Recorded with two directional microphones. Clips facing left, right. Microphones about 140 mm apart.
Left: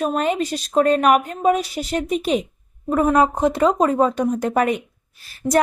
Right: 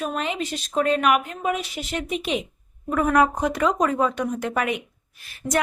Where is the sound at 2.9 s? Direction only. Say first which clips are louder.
Left 3 dB; 25° left (ahead or behind).